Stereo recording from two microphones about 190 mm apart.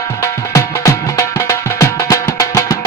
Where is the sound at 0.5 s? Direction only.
15° left (ahead or behind).